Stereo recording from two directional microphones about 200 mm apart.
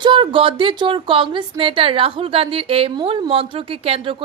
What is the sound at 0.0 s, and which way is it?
Speech, 25° right (ahead or behind).